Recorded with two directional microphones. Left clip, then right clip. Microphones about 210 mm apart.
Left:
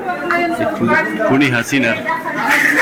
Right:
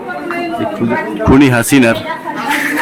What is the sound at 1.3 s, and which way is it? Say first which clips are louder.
Speech: right 9 dB; 40° right (ahead or behind).